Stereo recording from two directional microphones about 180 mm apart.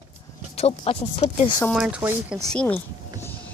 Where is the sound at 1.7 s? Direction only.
5° right (ahead or behind).